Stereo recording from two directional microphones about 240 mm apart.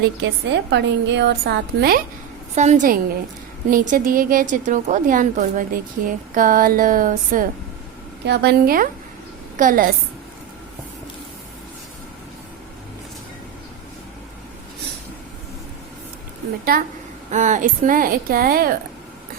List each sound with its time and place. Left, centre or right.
0.0 s a woman's voice: right
2.6 s a woman's voice: right
8.2 s a woman's voice: right
16.7 s a woman's voice: right